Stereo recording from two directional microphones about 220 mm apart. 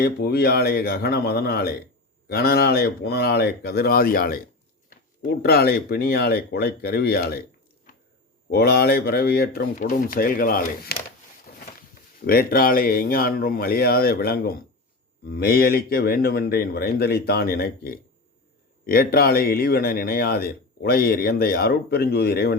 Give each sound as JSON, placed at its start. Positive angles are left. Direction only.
{"t": 0.0, "sound": "a man's voice", "side_deg": 45}
{"t": 8.4, "sound": "a man's voice", "side_deg": 45}
{"t": 12.2, "sound": "a man's voice", "side_deg": 45}